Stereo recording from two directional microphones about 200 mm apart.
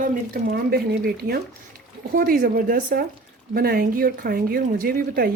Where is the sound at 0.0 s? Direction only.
50° right (ahead or behind).